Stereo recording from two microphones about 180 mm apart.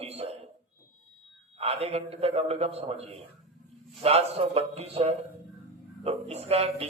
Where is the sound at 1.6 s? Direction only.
35° right (ahead or behind).